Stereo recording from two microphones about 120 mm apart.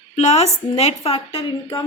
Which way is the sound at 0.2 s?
65° left (ahead or behind).